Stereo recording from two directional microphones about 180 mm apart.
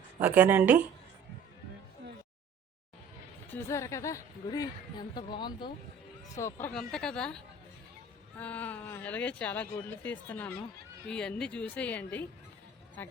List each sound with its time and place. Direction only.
0.2 s speech: 10° right (ahead or behind)
3.5 s a woman's voice: 15° left (ahead or behind)
6.4 s speech: 10° left (ahead or behind)